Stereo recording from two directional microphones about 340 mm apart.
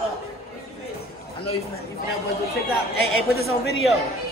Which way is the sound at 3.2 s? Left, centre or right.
Left.